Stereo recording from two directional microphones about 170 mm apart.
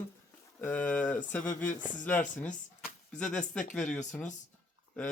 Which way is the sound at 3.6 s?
45° left (ahead or behind).